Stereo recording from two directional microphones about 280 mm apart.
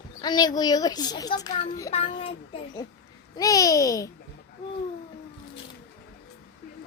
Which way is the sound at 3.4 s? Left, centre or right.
Centre.